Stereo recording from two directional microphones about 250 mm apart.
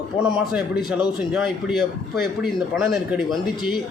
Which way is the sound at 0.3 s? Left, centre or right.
Centre.